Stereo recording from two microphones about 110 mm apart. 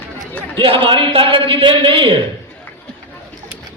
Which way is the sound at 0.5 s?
55° right (ahead or behind).